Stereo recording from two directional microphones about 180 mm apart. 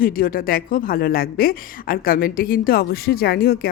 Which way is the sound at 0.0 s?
55° left (ahead or behind).